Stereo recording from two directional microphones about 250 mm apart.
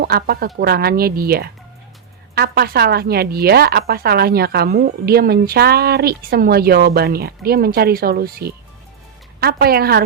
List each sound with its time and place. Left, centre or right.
0.0 s speech: right